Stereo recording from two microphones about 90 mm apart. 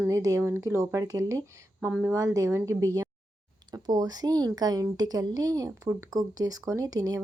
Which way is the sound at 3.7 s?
50° right (ahead or behind).